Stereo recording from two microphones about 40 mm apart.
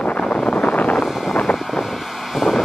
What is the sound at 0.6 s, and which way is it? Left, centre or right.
Vehicle, left.